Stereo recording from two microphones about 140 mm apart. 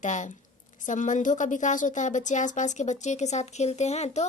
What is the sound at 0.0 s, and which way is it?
Speech, 60° left (ahead or behind).